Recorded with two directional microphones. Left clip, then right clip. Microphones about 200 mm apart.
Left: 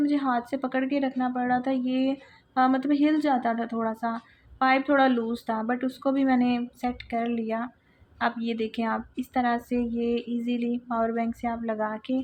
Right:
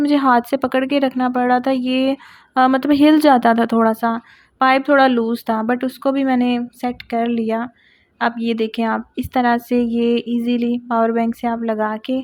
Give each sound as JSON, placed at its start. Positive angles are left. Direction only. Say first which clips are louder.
{"t": 0.0, "sound": "a woman's voice", "louder": "right 11 dB", "side_deg": -50}